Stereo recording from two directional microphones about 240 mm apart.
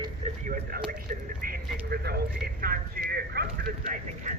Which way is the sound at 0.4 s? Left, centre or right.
Right.